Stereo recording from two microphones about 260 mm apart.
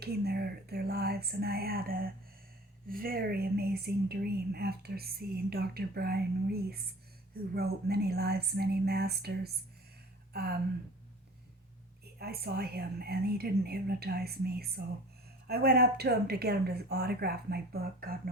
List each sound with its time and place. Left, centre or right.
0.0 s speech: right
12.2 s speech: right